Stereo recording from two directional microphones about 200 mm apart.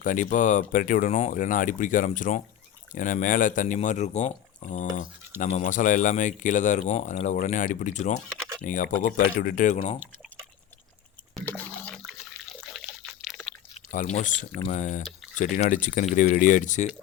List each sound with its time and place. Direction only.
0.0 s speech: 40° left (ahead or behind)
11.3 s a sound: 10° left (ahead or behind)
12.0 s water: centre (ahead or behind)
13.7 s speech: 35° left (ahead or behind)